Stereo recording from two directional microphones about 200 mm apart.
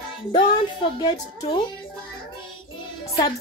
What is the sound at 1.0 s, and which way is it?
Speech, 25° left (ahead or behind).